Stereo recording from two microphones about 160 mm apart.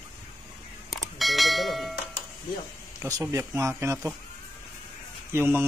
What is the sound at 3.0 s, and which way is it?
A man's voice, 20° right (ahead or behind).